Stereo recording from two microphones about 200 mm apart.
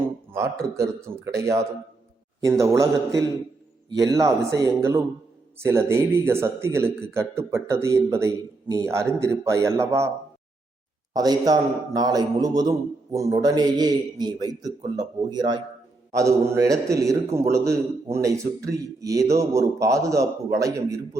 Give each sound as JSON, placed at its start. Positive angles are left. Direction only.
{"t": 0.3, "sound": "speech", "side_deg": -15}
{"t": 11.1, "sound": "a man's voice", "side_deg": -20}